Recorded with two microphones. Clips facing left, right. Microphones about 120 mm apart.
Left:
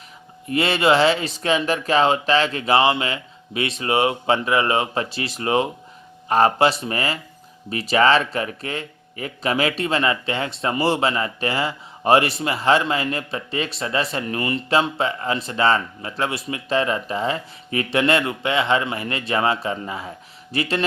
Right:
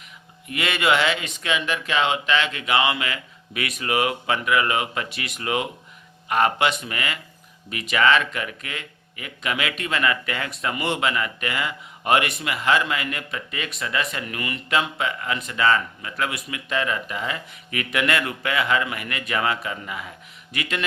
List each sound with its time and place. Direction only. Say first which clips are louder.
0.4 s speech: left 5 dB; 30° left (ahead or behind)